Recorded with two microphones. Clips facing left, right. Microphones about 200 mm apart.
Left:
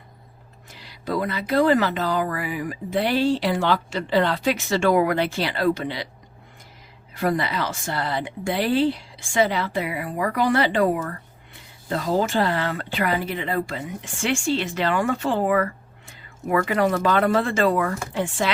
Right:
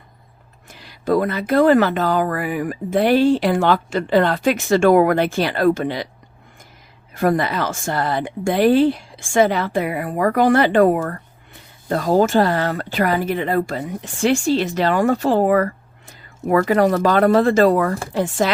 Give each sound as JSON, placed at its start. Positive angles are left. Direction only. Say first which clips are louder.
{"t": 0.7, "sound": "speech", "louder": "right 8 dB", "side_deg": -50}
{"t": 7.1, "sound": "speech", "louder": "right 5 dB", "side_deg": -50}